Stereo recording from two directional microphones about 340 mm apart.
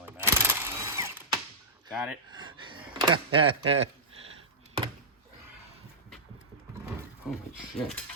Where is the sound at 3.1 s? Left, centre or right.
Centre.